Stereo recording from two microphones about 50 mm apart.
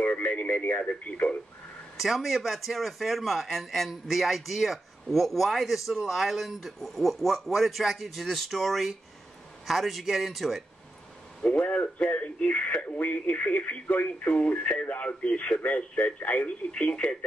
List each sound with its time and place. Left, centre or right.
0.0 s speech: left
2.0 s speech: centre
11.4 s speech: left